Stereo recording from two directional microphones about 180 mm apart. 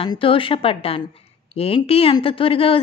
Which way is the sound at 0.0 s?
30° left (ahead or behind).